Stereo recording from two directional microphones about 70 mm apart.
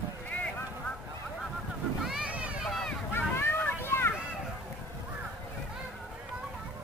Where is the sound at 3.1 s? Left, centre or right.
Left.